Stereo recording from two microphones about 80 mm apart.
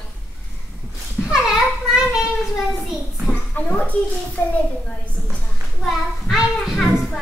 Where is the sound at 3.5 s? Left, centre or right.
Centre.